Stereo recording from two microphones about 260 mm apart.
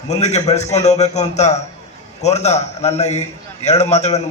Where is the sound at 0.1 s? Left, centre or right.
Left.